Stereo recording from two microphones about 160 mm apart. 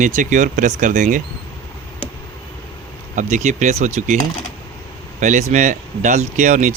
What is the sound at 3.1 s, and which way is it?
Speech, 50° right (ahead or behind).